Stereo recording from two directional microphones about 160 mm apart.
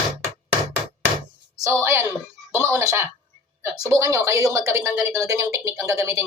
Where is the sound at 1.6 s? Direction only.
15° right (ahead or behind).